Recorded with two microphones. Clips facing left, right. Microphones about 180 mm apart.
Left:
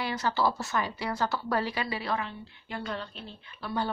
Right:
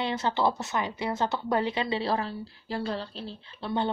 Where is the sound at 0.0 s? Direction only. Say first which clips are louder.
Right 2 dB; 25° right (ahead or behind).